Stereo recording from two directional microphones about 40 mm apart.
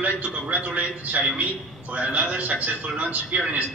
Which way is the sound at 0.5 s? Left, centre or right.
Right.